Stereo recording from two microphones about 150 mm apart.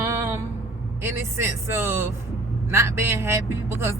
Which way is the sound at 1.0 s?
15° right (ahead or behind).